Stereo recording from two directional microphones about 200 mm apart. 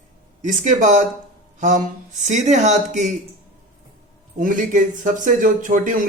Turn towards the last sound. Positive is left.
turn(degrees=-40)  # may be behind; listen again after turning